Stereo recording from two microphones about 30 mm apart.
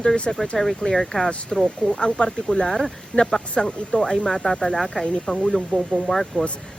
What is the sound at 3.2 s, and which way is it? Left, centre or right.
Speech, left.